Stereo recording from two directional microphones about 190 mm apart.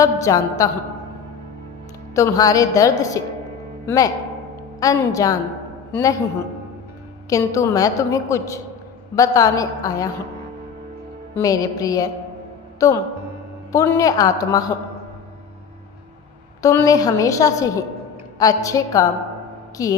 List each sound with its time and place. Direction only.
0.0 s a woman's voice: 15° left (ahead or behind)
2.1 s a woman's voice: 15° left (ahead or behind)
7.3 s a woman's voice: 15° left (ahead or behind)
11.3 s a woman's voice: 20° left (ahead or behind)
16.6 s a woman's voice: 15° left (ahead or behind)